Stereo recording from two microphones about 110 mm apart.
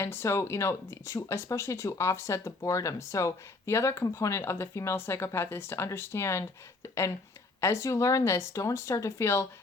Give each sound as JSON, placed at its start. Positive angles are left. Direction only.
{"t": 0.0, "sound": "speech", "side_deg": 25}